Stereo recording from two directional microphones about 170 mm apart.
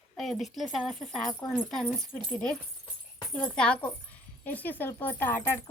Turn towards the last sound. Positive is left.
turn(degrees=10)  # may be behind; listen again after turning